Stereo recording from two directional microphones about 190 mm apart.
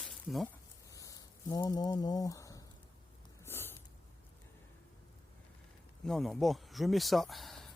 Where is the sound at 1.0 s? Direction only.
20° left (ahead or behind).